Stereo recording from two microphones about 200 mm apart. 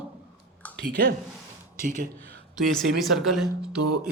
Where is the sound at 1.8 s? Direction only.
40° right (ahead or behind).